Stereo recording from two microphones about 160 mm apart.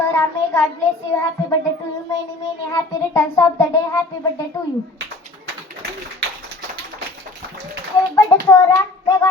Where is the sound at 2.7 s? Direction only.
20° left (ahead or behind).